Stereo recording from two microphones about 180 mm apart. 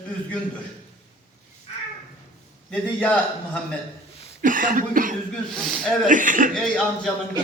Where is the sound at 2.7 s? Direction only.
5° left (ahead or behind).